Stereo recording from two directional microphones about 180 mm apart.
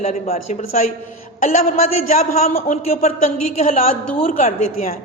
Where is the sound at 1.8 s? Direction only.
35° left (ahead or behind).